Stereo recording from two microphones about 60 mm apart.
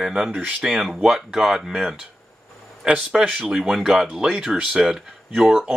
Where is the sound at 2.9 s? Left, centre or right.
Centre.